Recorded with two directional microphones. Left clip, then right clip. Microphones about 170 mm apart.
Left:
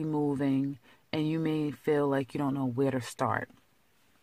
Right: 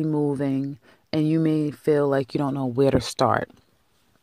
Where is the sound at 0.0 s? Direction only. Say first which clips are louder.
Right 6 dB; 20° right (ahead or behind); by 3.4 s 40° right (ahead or behind).